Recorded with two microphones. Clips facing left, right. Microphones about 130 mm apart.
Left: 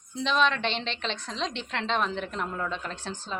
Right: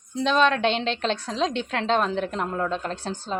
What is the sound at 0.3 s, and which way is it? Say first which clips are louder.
Speech: right 5 dB; centre (ahead or behind).